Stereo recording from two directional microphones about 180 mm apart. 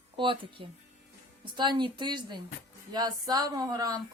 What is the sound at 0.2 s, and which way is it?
A woman's voice, 30° right (ahead or behind).